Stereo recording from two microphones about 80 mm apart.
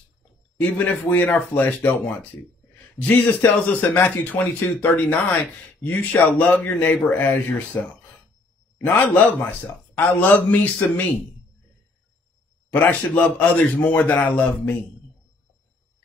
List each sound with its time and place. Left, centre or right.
0.6 s a man's voice: left
12.7 s speech: centre